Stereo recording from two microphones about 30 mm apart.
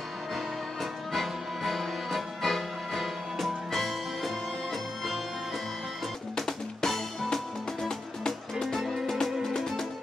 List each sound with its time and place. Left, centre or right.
1.1 s music: centre
6.3 s music: centre
8.3 s music: centre